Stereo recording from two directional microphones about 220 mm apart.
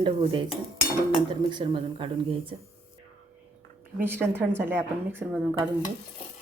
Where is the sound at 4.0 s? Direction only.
10° right (ahead or behind).